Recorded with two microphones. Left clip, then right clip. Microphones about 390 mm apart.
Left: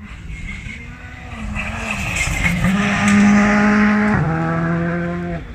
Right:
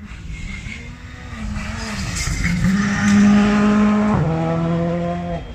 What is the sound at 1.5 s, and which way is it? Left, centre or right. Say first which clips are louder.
Vehicle: left 6 dB; centre.